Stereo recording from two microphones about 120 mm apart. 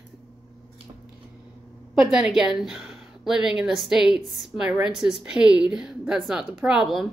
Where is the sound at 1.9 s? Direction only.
5° right (ahead or behind).